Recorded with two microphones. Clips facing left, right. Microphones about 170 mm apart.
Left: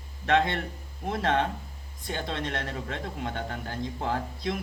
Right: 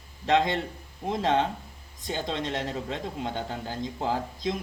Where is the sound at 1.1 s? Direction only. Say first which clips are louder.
Right 1 dB; 25° right (ahead or behind).